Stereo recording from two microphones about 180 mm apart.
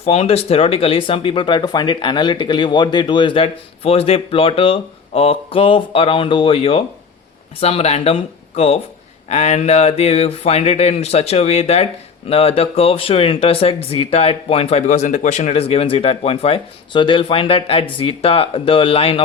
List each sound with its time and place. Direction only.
0.0 s speech: 35° left (ahead or behind)